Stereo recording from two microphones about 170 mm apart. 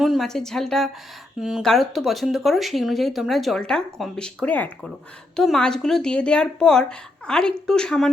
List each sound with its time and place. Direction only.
0.0 s speech: centre (ahead or behind)